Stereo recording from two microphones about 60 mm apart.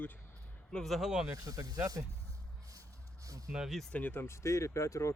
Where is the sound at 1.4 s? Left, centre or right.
Right.